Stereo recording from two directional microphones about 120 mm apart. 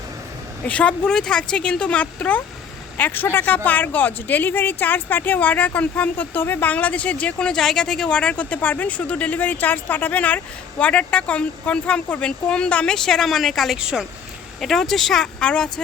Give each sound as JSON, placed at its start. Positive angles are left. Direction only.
{"t": 0.7, "sound": "speech", "side_deg": 10}